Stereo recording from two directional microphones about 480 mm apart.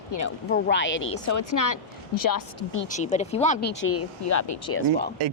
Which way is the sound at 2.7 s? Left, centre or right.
Centre.